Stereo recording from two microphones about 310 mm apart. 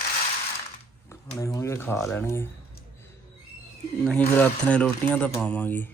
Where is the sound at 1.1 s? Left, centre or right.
Centre.